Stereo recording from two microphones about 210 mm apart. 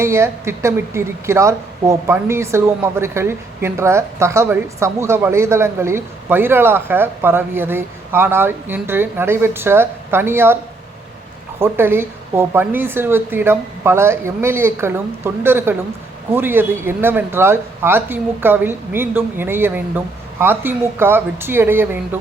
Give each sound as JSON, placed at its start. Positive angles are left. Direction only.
{"t": 0.0, "sound": "speech", "side_deg": -10}
{"t": 11.6, "sound": "speech", "side_deg": -10}